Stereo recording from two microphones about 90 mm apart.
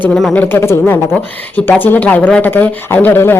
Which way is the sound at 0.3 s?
25° left (ahead or behind).